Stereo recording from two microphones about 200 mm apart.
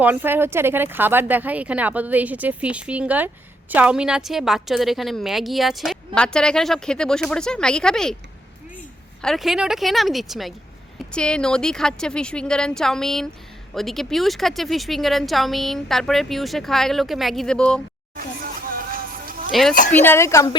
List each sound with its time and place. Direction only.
0.0 s speech: 10° right (ahead or behind)
9.2 s speech: centre (ahead or behind)
18.2 s music: 45° right (ahead or behind)
19.5 s a woman's voice: centre (ahead or behind)